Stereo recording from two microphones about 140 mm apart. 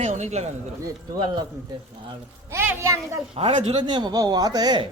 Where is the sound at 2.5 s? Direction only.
15° right (ahead or behind).